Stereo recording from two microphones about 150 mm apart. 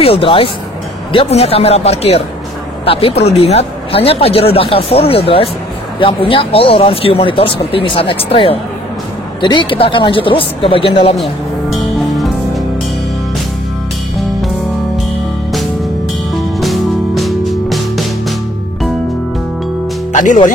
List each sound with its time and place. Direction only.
0.0 s speech: 40° left (ahead or behind)
11.8 s music: centre (ahead or behind)
16.5 s music: centre (ahead or behind)
20.1 s speech: 55° left (ahead or behind)